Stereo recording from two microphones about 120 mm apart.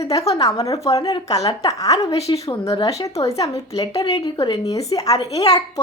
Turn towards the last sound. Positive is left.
turn(degrees=30)  # may be behind; listen again after turning